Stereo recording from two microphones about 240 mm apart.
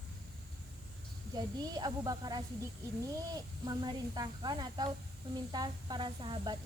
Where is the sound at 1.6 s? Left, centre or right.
Centre.